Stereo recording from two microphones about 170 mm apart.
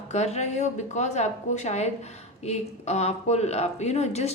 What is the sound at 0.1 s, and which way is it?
A woman's voice, 40° left (ahead or behind).